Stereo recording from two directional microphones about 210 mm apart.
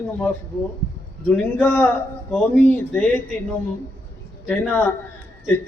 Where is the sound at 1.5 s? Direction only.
10° left (ahead or behind).